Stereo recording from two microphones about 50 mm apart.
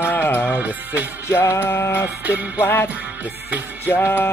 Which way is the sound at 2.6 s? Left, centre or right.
Left.